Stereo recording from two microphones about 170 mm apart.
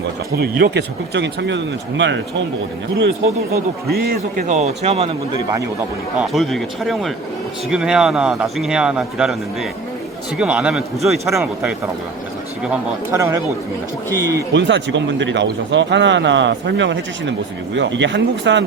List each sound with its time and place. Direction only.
0.3 s speech: 75° right (ahead or behind)
3.5 s a man's voice: 65° right (ahead or behind)
4.5 s a man's voice: 40° right (ahead or behind)
6.1 s a man's voice: centre (ahead or behind)
11.3 s speech: 15° right (ahead or behind)
14.1 s speech: 20° right (ahead or behind)
14.5 s speech: 90° right